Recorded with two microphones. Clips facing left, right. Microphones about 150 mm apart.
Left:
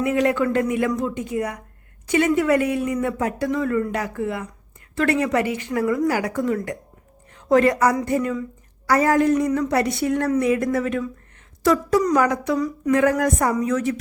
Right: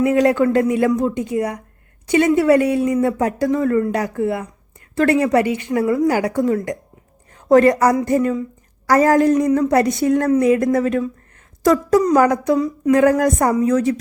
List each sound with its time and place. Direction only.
0.0 s a woman's voice: 35° right (ahead or behind)
12.5 s a woman's voice: 25° right (ahead or behind)
12.9 s speech: 35° right (ahead or behind)